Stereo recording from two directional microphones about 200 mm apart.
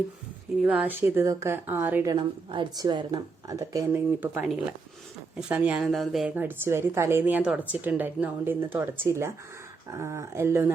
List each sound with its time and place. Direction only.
0.6 s speech: 5° right (ahead or behind)
2.1 s speech: 25° right (ahead or behind)